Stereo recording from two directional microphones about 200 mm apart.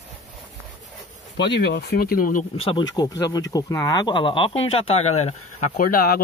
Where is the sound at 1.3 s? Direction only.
60° left (ahead or behind); by 2.4 s 45° left (ahead or behind).